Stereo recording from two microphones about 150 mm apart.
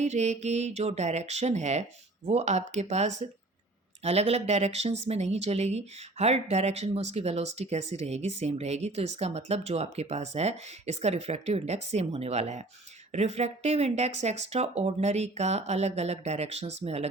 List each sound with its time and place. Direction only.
0.0 s speech: 50° right (ahead or behind)